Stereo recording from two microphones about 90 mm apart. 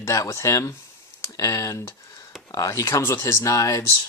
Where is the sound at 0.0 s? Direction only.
35° left (ahead or behind).